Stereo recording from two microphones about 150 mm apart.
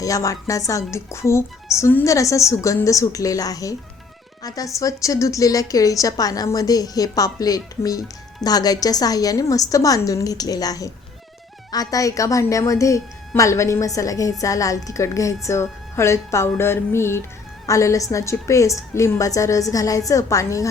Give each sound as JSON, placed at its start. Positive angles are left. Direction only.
{"t": 0.0, "sound": "a woman's voice", "side_deg": 20}